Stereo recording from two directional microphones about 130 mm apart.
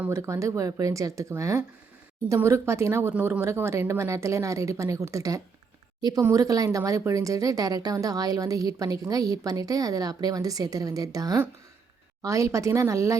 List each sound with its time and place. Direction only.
0.0 s a woman's voice: 20° right (ahead or behind)